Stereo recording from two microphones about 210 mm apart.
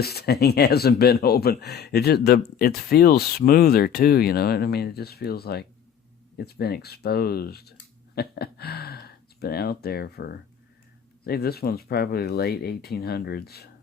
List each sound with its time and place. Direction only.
0.0 s speech: 50° left (ahead or behind)